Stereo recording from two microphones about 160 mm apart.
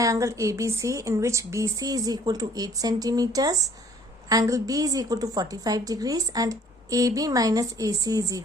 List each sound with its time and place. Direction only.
0.0 s a woman's voice: 20° right (ahead or behind)